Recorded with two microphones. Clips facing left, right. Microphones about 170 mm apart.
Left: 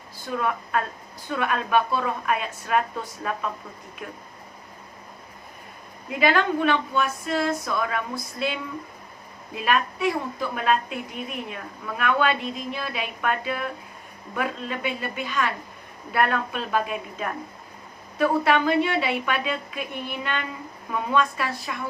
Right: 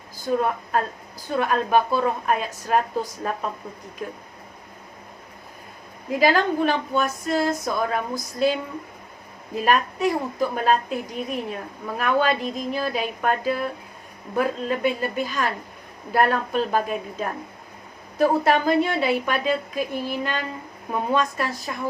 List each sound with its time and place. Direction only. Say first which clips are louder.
0.3 s a woman's voice: right 4 dB; 35° right (ahead or behind)
6.1 s a woman's voice: right 2 dB; 35° right (ahead or behind)
9.6 s a woman's voice: right 3 dB; 40° right (ahead or behind)